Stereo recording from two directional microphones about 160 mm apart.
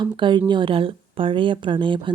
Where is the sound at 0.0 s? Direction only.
30° right (ahead or behind).